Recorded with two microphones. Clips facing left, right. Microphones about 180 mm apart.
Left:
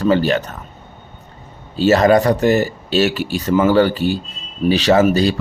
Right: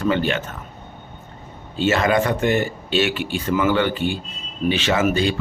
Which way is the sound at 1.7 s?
40° left (ahead or behind).